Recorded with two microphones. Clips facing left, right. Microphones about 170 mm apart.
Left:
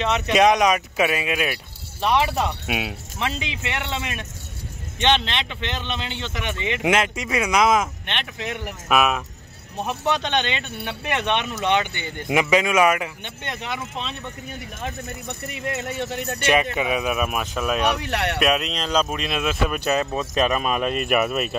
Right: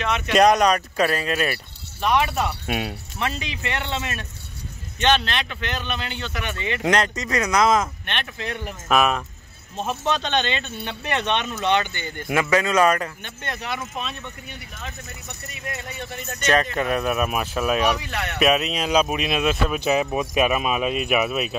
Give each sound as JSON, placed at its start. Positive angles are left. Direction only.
{"t": 0.3, "sound": "speech", "side_deg": 0}
{"t": 2.6, "sound": "speech", "side_deg": 5}
{"t": 3.2, "sound": "speech", "side_deg": 20}
{"t": 8.8, "sound": "speech", "side_deg": 5}
{"t": 9.8, "sound": "speech", "side_deg": 15}
{"t": 13.2, "sound": "speech", "side_deg": 20}
{"t": 14.5, "sound": "speech", "side_deg": 50}
{"t": 16.0, "sound": "speech", "side_deg": 70}
{"t": 16.7, "sound": "speech", "side_deg": 0}
{"t": 17.9, "sound": "speech", "side_deg": 65}
{"t": 18.4, "sound": "speech", "side_deg": -5}
{"t": 19.8, "sound": "speech", "side_deg": -15}